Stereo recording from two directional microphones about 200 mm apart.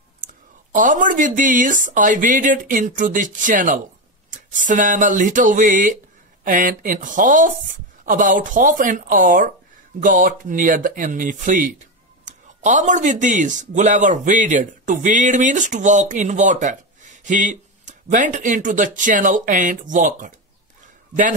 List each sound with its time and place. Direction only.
0.7 s speech: 40° right (ahead or behind)